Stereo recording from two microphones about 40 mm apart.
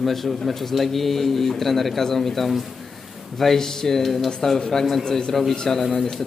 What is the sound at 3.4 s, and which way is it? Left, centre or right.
Speech, centre.